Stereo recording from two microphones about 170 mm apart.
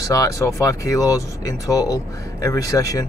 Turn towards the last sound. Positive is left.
turn(degrees=20)  # may be behind; listen again after turning